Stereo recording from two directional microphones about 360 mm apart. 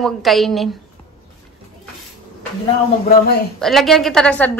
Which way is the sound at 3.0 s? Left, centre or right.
Left.